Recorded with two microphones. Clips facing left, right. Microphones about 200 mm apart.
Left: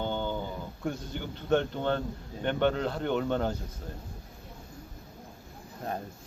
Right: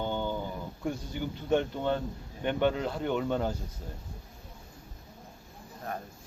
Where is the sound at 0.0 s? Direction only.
10° right (ahead or behind).